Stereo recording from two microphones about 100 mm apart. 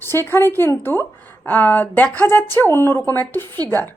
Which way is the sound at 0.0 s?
25° left (ahead or behind).